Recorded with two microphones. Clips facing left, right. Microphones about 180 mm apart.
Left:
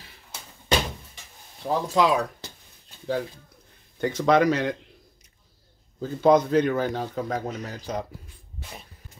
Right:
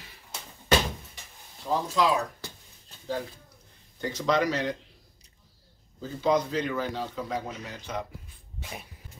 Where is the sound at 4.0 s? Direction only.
55° left (ahead or behind).